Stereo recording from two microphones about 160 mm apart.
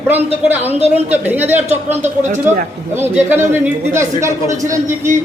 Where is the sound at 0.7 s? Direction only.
45° right (ahead or behind).